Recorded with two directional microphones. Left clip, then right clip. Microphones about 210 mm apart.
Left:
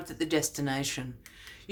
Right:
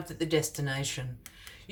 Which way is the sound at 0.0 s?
30° left (ahead or behind).